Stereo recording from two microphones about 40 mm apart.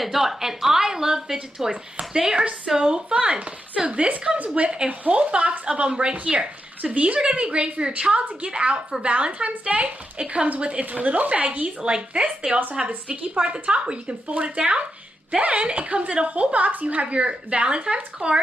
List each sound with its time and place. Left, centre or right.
0.0 s a woman's voice: centre; by 18.4 s right